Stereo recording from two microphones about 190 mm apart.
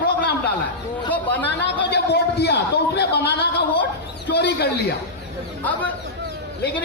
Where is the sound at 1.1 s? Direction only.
10° left (ahead or behind).